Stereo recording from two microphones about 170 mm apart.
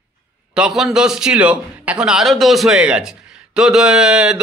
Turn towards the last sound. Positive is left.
turn(degrees=-5)  # may be behind; listen again after turning